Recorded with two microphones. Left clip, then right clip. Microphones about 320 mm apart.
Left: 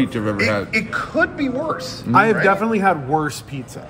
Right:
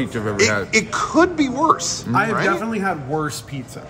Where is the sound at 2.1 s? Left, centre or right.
Centre.